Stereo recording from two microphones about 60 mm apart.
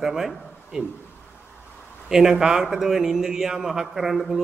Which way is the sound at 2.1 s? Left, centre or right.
Centre.